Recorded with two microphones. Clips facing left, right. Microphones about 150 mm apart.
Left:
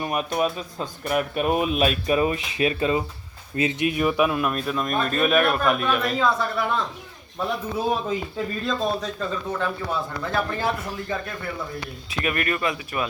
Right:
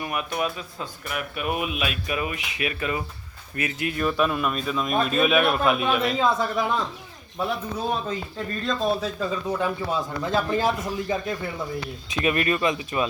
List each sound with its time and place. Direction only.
0.0 s speech: 30° left (ahead or behind)
4.3 s a man's voice: 5° left (ahead or behind)
6.1 s speech: 20° right (ahead or behind)
7.3 s speech: 5° left (ahead or behind)
8.6 s a man's voice: 5° right (ahead or behind); by 13.1 s 20° right (ahead or behind)